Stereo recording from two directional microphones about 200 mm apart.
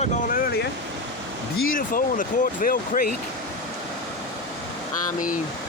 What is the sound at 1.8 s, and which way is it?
Speech, 45° left (ahead or behind).